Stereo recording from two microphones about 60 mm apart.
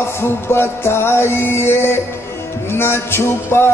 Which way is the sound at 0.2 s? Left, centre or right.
Left.